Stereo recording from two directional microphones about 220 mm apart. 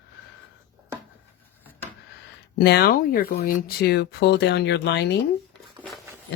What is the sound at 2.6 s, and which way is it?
Speech, 45° left (ahead or behind).